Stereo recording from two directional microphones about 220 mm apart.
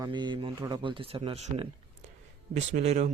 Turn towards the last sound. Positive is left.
turn(degrees=-30)  # may be behind; listen again after turning